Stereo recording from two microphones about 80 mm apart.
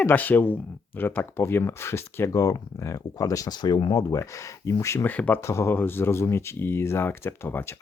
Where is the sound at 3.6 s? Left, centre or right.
Left.